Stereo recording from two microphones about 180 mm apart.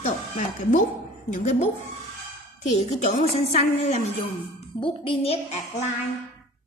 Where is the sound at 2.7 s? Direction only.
35° left (ahead or behind).